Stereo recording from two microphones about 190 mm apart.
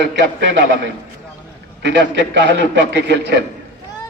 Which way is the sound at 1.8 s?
75° right (ahead or behind).